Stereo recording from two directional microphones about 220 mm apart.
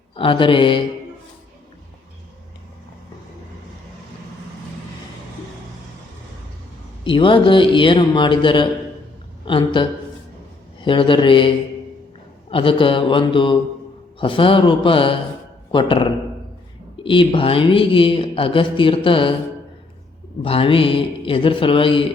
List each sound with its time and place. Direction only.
0.2 s a woman's voice: 20° left (ahead or behind)
7.0 s a woman's voice: 25° left (ahead or behind)
10.8 s a woman's voice: 25° left (ahead or behind)
20.4 s a woman's voice: 25° left (ahead or behind)